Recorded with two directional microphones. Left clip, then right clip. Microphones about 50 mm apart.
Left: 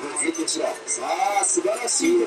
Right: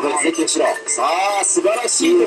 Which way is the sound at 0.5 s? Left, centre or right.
Left.